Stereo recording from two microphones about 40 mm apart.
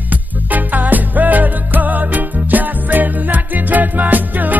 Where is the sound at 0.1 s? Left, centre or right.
Right.